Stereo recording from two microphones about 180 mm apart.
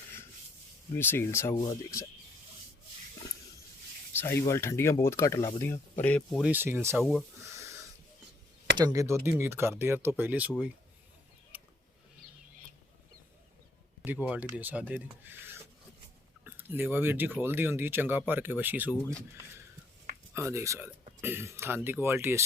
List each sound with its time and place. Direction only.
0.9 s speech: 10° left (ahead or behind)
4.1 s speech: 10° left (ahead or behind)
6.4 s speech: 10° right (ahead or behind)
6.9 s speech: centre (ahead or behind)
7.5 s wheeze: 15° right (ahead or behind)
8.7 s speech: 20° right (ahead or behind)
11.5 s a sound: 10° right (ahead or behind)
14.0 s speech: 10° right (ahead or behind)
16.4 s speech: 10° right (ahead or behind)
20.3 s speech: 15° right (ahead or behind)